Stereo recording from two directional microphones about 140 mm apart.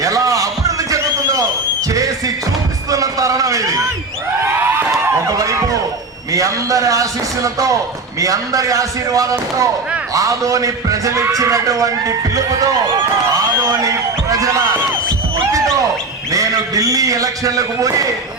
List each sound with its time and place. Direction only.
0.0 s music: 25° right (ahead or behind)
2.9 s speech: 25° right (ahead or behind)
5.4 s speech: 25° right (ahead or behind)
16.3 s speech: 25° right (ahead or behind)